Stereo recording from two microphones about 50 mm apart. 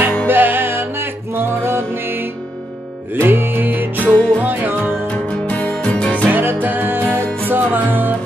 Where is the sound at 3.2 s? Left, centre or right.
Right.